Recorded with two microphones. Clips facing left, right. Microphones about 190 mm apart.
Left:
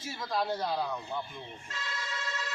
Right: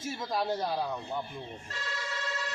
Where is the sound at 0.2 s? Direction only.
20° right (ahead or behind).